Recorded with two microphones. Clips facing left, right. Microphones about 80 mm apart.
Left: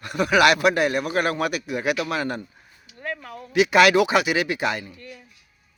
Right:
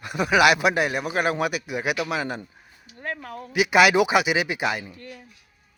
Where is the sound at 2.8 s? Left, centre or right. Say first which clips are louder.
Even; right.